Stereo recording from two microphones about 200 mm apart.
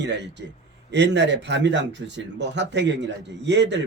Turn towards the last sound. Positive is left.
turn(degrees=-60)  # may be behind; listen again after turning